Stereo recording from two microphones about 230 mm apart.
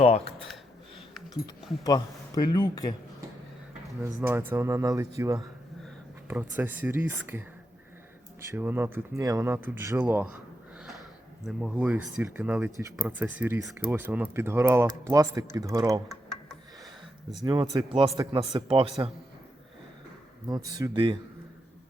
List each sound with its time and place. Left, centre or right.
0.0 s speech: left
1.8 s speech: centre
4.0 s speech: centre
11.4 s speech: centre
17.4 s a man's voice: centre
20.5 s a man's voice: centre